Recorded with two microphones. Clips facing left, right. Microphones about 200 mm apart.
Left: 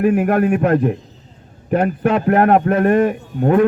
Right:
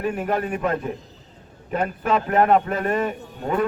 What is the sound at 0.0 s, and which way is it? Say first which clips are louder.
Speech: left 9 dB; 60° left (ahead or behind).